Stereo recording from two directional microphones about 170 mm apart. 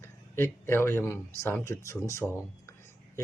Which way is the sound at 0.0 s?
15° left (ahead or behind).